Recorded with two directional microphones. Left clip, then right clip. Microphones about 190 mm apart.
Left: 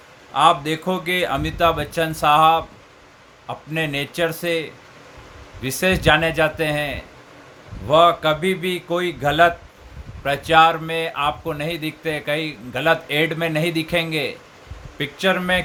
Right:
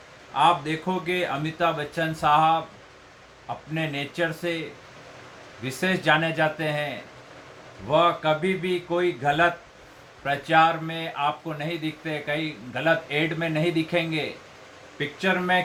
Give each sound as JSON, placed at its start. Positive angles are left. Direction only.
{"t": 0.3, "sound": "speech", "side_deg": 50}
{"t": 5.6, "sound": "speech", "side_deg": 50}